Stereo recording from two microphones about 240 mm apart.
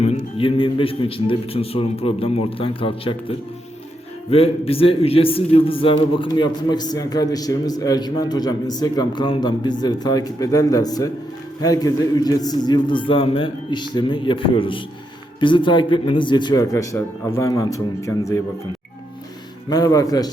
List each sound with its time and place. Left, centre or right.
0.0 s a man's voice: left
19.7 s a man's voice: centre